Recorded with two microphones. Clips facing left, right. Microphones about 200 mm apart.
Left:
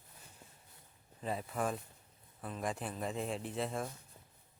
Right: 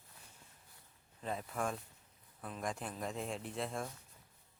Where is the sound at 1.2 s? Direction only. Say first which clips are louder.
Left 2 dB; 5° left (ahead or behind).